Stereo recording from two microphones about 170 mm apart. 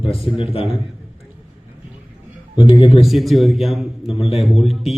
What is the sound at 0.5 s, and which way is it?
Speech, 35° left (ahead or behind).